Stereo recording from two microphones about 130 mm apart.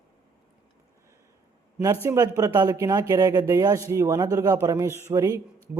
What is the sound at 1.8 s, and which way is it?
A man's voice, 20° right (ahead or behind).